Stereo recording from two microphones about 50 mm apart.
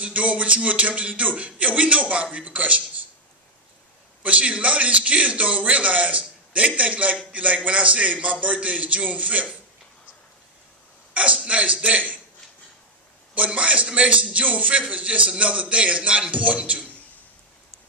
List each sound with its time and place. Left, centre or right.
0.0 s a man's voice: right
4.2 s a man's voice: right
11.1 s a man's voice: right
13.3 s a man's voice: right